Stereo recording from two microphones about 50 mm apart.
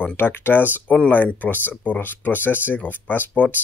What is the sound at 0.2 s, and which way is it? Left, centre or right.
Speech, left.